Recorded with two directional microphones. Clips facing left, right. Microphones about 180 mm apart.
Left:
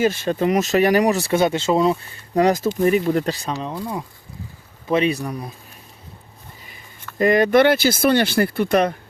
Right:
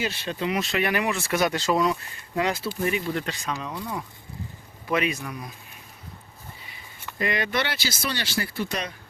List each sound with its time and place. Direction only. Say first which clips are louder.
0.0 s speech: left 9 dB; 45° left (ahead or behind); by 2.0 s 25° left (ahead or behind)
2.3 s speech: left 9 dB; 40° left (ahead or behind)
7.2 s speech: left 12 dB; 45° left (ahead or behind)